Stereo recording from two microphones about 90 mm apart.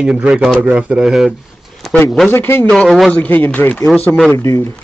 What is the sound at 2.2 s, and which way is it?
Speech, 25° left (ahead or behind).